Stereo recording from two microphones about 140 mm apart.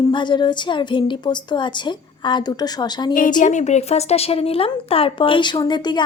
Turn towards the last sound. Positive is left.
turn(degrees=30)  # may be behind; listen again after turning